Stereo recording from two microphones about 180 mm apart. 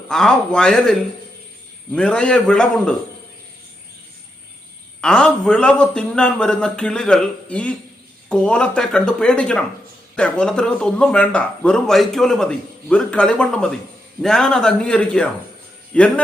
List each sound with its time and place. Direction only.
0.1 s speech: 5° left (ahead or behind)
4.9 s a man's voice: 5° left (ahead or behind)